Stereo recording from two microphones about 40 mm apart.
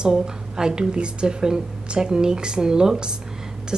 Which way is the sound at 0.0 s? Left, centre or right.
Centre.